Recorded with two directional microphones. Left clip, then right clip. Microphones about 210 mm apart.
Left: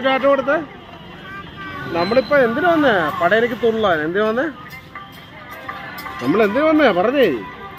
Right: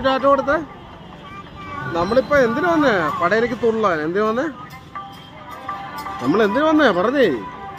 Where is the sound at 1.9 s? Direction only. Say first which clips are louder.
Left 1 dB; 5° right (ahead or behind).